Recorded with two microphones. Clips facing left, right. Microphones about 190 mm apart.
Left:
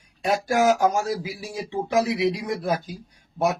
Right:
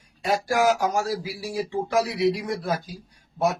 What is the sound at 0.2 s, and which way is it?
Speech, 20° left (ahead or behind).